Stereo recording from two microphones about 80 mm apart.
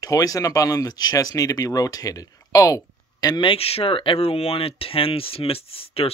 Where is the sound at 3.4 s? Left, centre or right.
Left.